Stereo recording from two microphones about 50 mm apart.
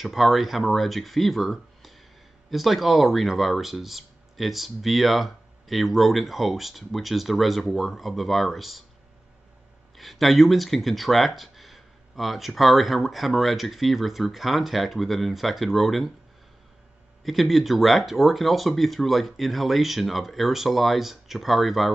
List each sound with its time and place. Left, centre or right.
0.0 s speech: centre
9.9 s speech: centre
17.2 s speech: centre